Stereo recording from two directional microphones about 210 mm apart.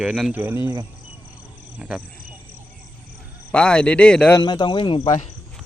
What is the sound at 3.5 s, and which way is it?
Speech, 5° left (ahead or behind).